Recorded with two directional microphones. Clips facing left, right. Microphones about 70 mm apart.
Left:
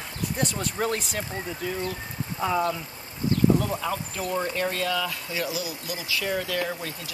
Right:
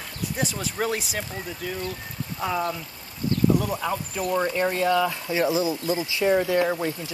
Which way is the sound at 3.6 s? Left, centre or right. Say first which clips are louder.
Right 1 dB; centre.